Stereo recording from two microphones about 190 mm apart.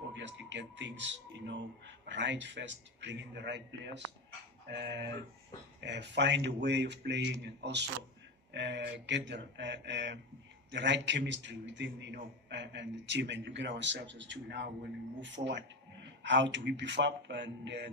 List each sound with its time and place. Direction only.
0.1 s a man's voice: 70° right (ahead or behind)